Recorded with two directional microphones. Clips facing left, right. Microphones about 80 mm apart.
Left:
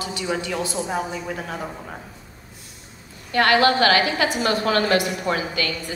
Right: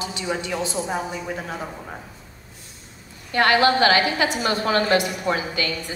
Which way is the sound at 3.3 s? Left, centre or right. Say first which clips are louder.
Even; right.